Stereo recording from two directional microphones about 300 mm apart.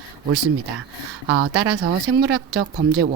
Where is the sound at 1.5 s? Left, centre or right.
Right.